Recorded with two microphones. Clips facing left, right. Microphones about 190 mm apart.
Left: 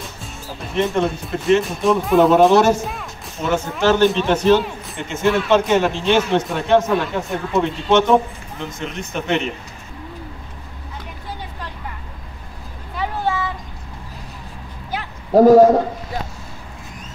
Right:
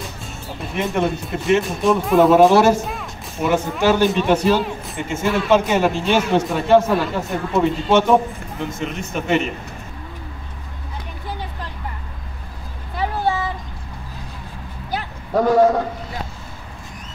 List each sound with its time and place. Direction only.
0.7 s a man's voice: 5° right (ahead or behind)
15.3 s a man's voice: 35° left (ahead or behind)